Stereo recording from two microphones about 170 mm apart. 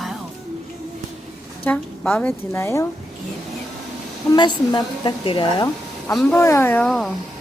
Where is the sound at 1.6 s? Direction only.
10° left (ahead or behind).